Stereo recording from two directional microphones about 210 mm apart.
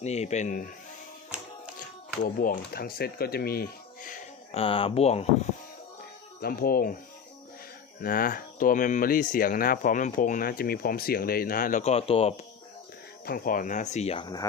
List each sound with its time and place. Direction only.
0.0 s speech: 30° left (ahead or behind)
2.2 s speech: 45° left (ahead or behind)
4.5 s speech: 25° left (ahead or behind)
6.4 s speech: 45° left (ahead or behind)
8.0 s speech: 40° left (ahead or behind)
13.2 s speech: 45° left (ahead or behind); by 14.4 s 20° left (ahead or behind)